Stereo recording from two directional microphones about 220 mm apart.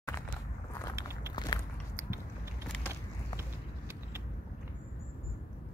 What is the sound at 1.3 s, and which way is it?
Walk, 20° left (ahead or behind).